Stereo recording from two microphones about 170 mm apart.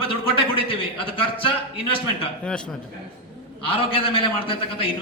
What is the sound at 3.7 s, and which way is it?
A man's voice, 35° left (ahead or behind).